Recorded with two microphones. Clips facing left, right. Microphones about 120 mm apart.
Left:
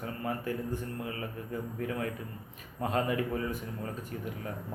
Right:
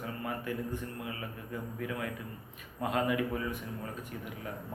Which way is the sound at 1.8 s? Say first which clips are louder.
Left 2 dB; 35° left (ahead or behind).